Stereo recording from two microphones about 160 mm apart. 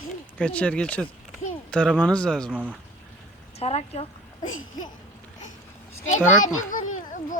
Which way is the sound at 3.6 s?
40° left (ahead or behind).